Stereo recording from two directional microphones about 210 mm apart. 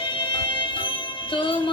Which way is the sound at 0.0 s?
25° left (ahead or behind).